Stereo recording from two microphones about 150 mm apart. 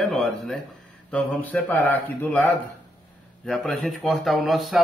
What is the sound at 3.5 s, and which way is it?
A man's voice, centre (ahead or behind).